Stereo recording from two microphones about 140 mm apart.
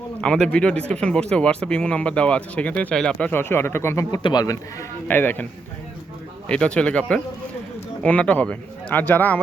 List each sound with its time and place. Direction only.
0.2 s speech: 5° left (ahead or behind)
4.2 s speech: 30° left (ahead or behind)
5.0 s speech: 15° left (ahead or behind)
6.5 s speech: 5° left (ahead or behind)